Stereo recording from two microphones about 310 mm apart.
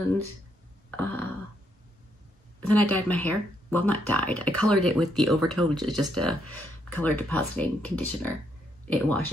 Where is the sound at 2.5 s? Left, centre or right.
Centre.